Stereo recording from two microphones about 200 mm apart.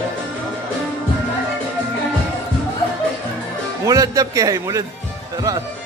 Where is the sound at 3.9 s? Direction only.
15° right (ahead or behind).